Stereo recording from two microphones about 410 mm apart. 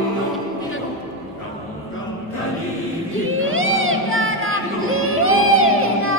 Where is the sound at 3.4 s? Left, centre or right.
Right.